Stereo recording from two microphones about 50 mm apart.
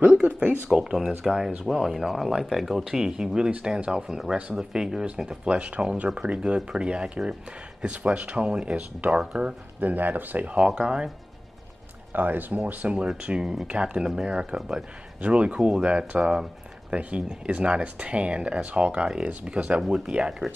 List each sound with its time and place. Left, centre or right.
0.1 s speech: right
0.7 s speech: centre
5.5 s speech: right
9.2 s speech: centre
9.8 s speech: right
10.5 s speech: centre
12.1 s speech: right
13.2 s speech: centre
20.2 s speech: centre